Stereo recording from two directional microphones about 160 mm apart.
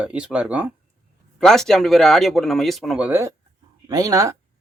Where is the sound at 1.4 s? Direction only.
5° left (ahead or behind).